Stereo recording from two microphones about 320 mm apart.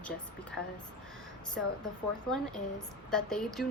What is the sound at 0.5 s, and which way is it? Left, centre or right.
Speech, centre.